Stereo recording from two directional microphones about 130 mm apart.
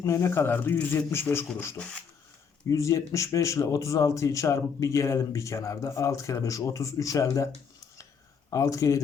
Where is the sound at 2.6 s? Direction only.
25° left (ahead or behind).